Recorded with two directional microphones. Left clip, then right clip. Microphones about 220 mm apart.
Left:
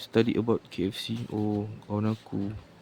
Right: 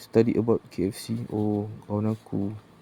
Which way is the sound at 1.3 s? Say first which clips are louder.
Right 4 dB; 20° left (ahead or behind).